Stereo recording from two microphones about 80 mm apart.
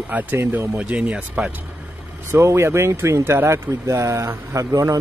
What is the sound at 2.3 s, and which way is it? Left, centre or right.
Speech, right.